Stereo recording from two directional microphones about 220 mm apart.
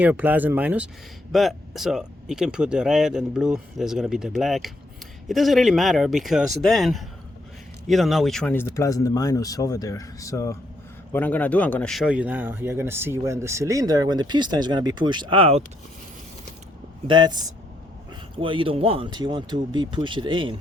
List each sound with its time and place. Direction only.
0.0 s speech: 5° right (ahead or behind); by 15.6 s 25° right (ahead or behind)
17.1 s speech: 20° right (ahead or behind)